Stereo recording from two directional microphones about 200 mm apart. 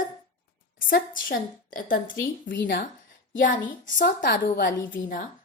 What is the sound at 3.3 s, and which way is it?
Speech, 40° left (ahead or behind).